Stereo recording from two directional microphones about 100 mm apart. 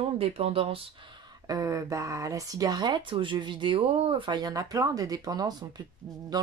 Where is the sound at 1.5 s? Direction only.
35° right (ahead or behind).